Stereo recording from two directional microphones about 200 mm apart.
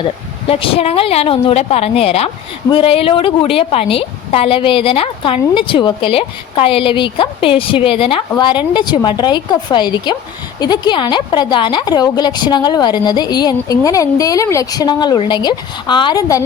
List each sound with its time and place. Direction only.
0.0 s speech: 30° left (ahead or behind)